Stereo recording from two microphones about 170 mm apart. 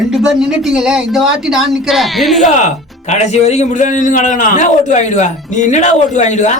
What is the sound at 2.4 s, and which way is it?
Speech, 45° left (ahead or behind).